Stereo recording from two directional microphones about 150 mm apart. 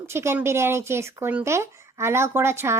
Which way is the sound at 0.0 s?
15° right (ahead or behind).